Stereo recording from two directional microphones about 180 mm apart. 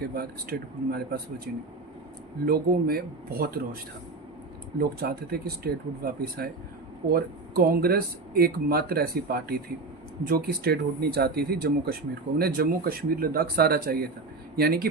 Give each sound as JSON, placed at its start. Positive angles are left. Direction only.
{"t": 0.1, "sound": "speech", "side_deg": -55}
{"t": 4.8, "sound": "speech", "side_deg": -60}